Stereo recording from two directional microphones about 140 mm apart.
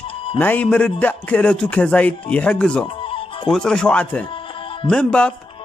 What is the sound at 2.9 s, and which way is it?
Music, 40° left (ahead or behind).